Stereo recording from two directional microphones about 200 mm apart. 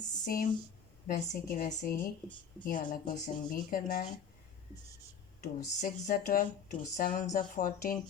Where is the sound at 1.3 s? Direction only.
45° left (ahead or behind).